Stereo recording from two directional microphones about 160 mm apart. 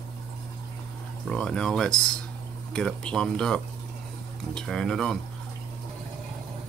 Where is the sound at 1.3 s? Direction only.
5° left (ahead or behind).